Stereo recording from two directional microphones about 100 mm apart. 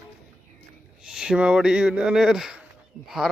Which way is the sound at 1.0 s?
5° right (ahead or behind).